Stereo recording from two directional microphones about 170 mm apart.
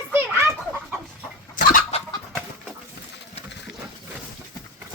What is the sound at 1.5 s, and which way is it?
Chicken, 55° left (ahead or behind).